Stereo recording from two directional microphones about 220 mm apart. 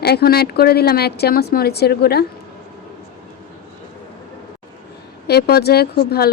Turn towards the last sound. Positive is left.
turn(degrees=45)  # may be behind; listen again after turning